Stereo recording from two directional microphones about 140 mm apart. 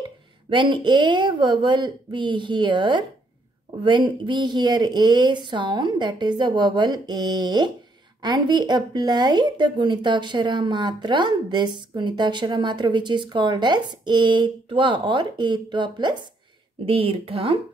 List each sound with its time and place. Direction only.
0.5 s speech: 35° right (ahead or behind)